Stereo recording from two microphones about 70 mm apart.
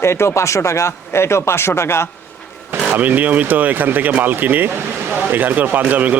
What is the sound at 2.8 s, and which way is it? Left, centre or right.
Speech, right.